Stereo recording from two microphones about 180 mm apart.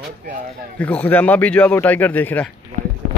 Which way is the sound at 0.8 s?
5° left (ahead or behind).